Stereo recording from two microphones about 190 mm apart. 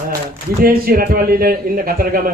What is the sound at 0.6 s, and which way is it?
A man's voice, 50° right (ahead or behind).